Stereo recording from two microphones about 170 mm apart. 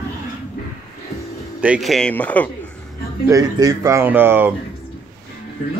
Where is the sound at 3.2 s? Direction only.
20° right (ahead or behind).